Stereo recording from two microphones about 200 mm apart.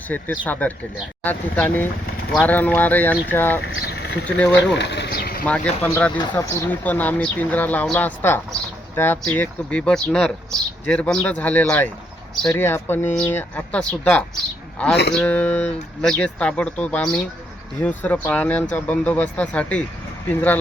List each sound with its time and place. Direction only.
0.1 s speech: 5° left (ahead or behind)
3.6 s a sound: 55° left (ahead or behind)
4.3 s speech: 5° left (ahead or behind)
4.8 s pigeon: 60° left (ahead or behind)
5.5 s speech: 5° left (ahead or behind)